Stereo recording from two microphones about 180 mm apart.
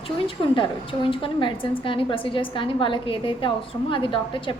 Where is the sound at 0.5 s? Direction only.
30° left (ahead or behind).